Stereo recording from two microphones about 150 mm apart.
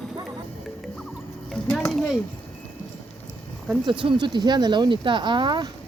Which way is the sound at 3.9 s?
35° right (ahead or behind).